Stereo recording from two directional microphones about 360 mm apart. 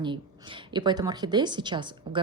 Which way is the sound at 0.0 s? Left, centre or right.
Centre.